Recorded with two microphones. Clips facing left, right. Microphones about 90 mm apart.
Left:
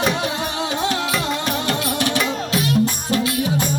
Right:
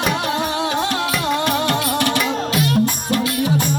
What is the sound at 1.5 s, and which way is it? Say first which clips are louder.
Music: right 3 dB; 50° right (ahead or behind).